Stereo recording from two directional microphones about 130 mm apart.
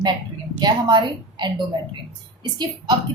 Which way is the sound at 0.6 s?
35° right (ahead or behind).